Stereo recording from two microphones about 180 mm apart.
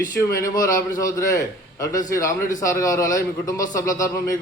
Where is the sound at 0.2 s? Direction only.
15° left (ahead or behind).